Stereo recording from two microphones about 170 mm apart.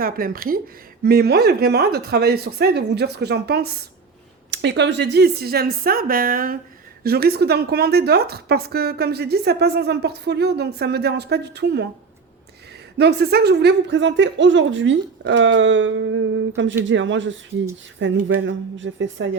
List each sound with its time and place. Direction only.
0.0 s a woman's voice: 60° right (ahead or behind)
4.5 s a woman's voice: 90° right
13.0 s speech: 75° right (ahead or behind); by 19.3 s 90° right